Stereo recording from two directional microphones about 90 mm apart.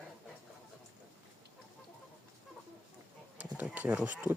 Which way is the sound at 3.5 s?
15° right (ahead or behind).